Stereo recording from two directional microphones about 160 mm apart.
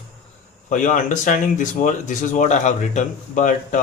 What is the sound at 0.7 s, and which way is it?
Speech, 50° left (ahead or behind).